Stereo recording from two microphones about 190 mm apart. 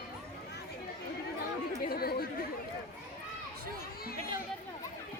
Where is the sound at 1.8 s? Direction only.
55° left (ahead or behind).